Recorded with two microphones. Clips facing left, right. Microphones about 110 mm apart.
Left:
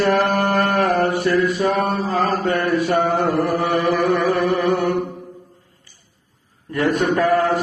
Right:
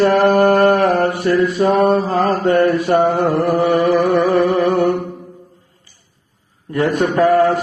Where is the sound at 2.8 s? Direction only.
35° right (ahead or behind).